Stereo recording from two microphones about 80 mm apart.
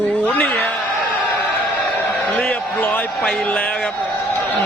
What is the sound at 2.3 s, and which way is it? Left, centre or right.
Speech, centre.